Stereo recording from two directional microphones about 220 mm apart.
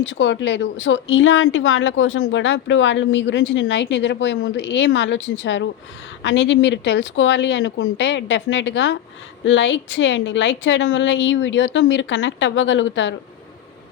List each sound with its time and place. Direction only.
0.0 s speech: 55° left (ahead or behind)